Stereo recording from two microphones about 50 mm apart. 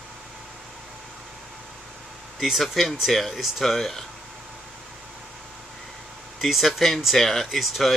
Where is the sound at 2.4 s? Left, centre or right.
Centre.